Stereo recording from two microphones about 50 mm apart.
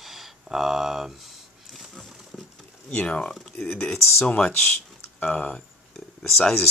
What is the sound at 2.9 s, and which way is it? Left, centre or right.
Speech, left.